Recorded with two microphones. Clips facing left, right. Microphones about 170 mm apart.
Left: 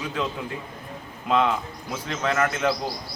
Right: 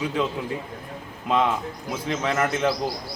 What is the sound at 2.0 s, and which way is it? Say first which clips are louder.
Speech: even; 20° right (ahead or behind).